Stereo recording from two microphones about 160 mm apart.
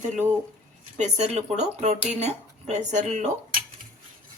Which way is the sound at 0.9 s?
45° right (ahead or behind).